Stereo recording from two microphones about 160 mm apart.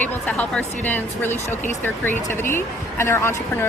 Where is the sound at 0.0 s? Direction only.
10° left (ahead or behind).